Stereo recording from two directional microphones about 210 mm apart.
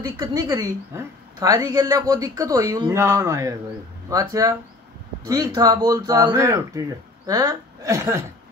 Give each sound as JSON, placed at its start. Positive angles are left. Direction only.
{"t": 0.0, "sound": "a woman's voice", "side_deg": -15}